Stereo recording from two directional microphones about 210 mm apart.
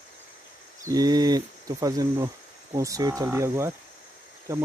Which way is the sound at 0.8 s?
20° right (ahead or behind).